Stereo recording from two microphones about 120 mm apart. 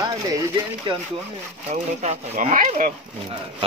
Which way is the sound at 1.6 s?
65° right (ahead or behind).